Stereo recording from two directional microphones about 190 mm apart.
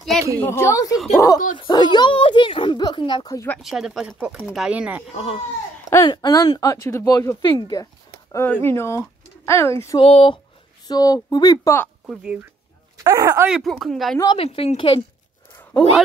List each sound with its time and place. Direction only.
0.4 s speech: 15° left (ahead or behind)
0.9 s speech: centre (ahead or behind)
1.6 s speech: 25° left (ahead or behind)
3.4 s speech: centre (ahead or behind)
5.1 s speech: 30° left (ahead or behind)
5.9 s speech: 20° left (ahead or behind)
9.9 s speech: 30° left (ahead or behind)
10.9 s speech: 20° left (ahead or behind)
12.1 s speech: 5° right (ahead or behind)
12.9 s speech: 15° right (ahead or behind)
13.5 s speech: centre (ahead or behind)
14.1 s speech: 20° left (ahead or behind)
15.7 s speech: 5° left (ahead or behind)